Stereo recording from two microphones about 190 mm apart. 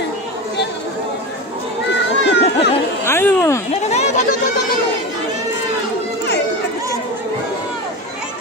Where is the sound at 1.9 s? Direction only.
65° left (ahead or behind).